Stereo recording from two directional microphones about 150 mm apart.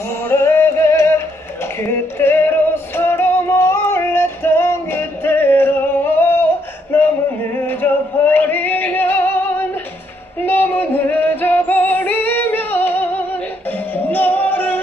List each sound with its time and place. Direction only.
0.3 s music: 15° left (ahead or behind)
6.9 s a sound: 15° left (ahead or behind)
7.5 s male singing: 10° left (ahead or behind)
10.4 s female singing: 15° left (ahead or behind)
13.9 s music: 10° left (ahead or behind)